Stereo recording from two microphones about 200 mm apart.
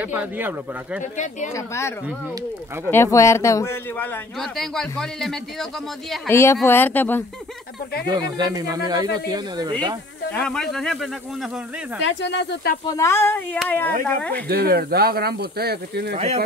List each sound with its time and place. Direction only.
0.0 s speech: 10° right (ahead or behind)
1.1 s speech: 35° left (ahead or behind)
1.5 s speech: 15° left (ahead or behind)
4.4 s speech: centre (ahead or behind)
6.2 s speech: 15° left (ahead or behind)
8.1 s speech: 20° right (ahead or behind)
10.3 s speech: 5° left (ahead or behind)
12.0 s speech: 65° left (ahead or behind)
12.8 s speech: 15° left (ahead or behind)
14.3 s speech: 50° right (ahead or behind)